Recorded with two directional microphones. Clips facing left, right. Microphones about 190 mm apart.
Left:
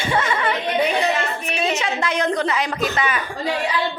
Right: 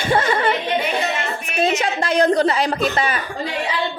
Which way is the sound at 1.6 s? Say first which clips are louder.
Right 4 dB; 35° right (ahead or behind).